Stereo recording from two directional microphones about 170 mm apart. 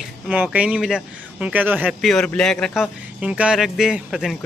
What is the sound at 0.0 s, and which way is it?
Speech, 10° right (ahead or behind).